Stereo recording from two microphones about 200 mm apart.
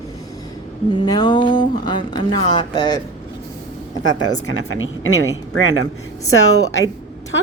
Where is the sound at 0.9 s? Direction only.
20° left (ahead or behind).